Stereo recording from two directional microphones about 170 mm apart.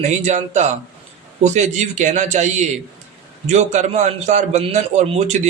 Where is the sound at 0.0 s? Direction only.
40° right (ahead or behind).